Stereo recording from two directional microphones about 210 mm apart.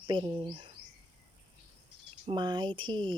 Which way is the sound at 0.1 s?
20° right (ahead or behind).